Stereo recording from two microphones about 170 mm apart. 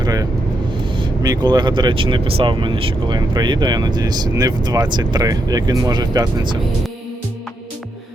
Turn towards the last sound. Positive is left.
turn(degrees=-25)  # may be behind; listen again after turning